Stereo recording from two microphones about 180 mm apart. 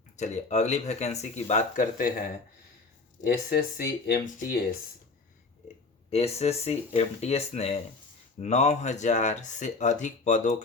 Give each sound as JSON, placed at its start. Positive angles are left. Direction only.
{"t": 0.2, "sound": "speech", "side_deg": 40}
{"t": 6.1, "sound": "speech", "side_deg": 35}